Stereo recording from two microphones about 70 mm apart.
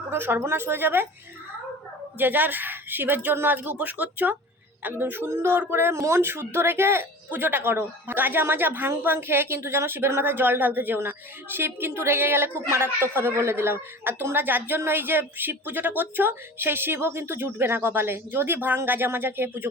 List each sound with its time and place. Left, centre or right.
0.1 s speech: right
2.1 s speech: right